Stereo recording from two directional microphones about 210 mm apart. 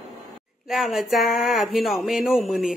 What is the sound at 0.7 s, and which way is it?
Speech, centre (ahead or behind).